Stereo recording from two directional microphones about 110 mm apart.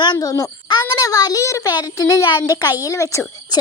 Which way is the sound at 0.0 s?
40° left (ahead or behind).